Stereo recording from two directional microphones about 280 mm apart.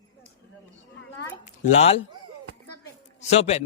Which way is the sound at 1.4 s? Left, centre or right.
Left.